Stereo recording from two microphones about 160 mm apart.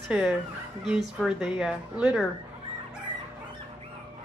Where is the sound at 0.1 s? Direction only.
10° right (ahead or behind).